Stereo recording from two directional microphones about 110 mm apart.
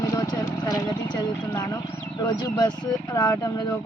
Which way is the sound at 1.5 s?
35° left (ahead or behind).